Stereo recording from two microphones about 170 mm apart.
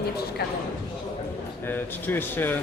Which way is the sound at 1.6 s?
10° left (ahead or behind).